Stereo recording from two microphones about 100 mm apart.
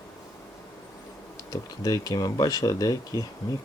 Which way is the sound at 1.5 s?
40° left (ahead or behind).